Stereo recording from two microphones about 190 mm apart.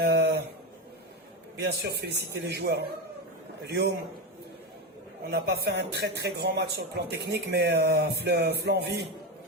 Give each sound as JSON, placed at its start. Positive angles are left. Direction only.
{"t": 0.0, "sound": "a sound", "side_deg": -60}
{"t": 1.5, "sound": "a man's voice", "side_deg": -60}
{"t": 5.3, "sound": "a man's voice", "side_deg": -60}